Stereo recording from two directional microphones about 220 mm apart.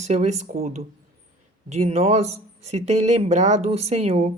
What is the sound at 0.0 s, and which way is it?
Speech, 30° right (ahead or behind).